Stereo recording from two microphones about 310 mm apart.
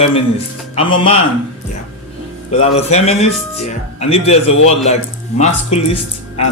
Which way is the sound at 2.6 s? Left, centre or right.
Centre.